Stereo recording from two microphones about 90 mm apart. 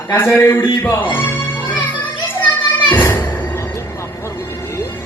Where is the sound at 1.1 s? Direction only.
20° left (ahead or behind).